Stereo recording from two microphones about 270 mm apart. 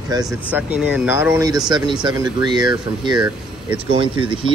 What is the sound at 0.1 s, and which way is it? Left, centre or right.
Speech, centre.